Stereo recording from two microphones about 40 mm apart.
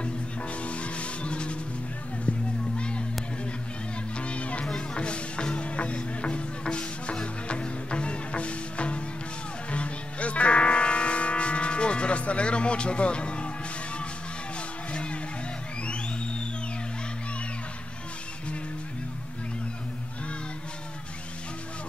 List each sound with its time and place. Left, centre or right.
0.7 s music: left
2.3 s a sound: left
2.8 s children playing: left
4.2 s music: left
14.9 s music: left